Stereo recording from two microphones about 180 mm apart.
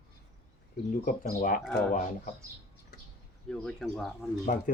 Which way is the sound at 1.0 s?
50° left (ahead or behind).